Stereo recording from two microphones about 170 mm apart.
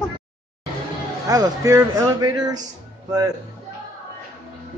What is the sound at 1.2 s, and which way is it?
Speech, 20° right (ahead or behind).